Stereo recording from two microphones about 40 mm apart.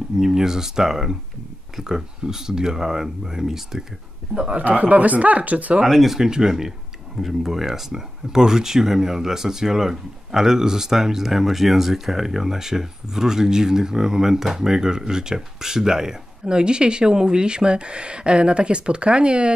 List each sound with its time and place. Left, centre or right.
0.2 s speech: centre
4.5 s speech: right
5.9 s speech: centre
6.1 s speech: centre